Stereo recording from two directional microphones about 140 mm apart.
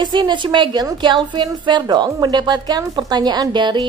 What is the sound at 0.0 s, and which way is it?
A woman's voice, 35° right (ahead or behind).